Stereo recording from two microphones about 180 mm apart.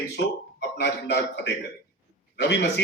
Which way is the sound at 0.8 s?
75° left (ahead or behind).